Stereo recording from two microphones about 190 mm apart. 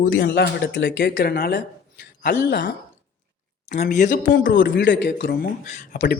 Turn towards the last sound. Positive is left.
turn(degrees=45)  # may be behind; listen again after turning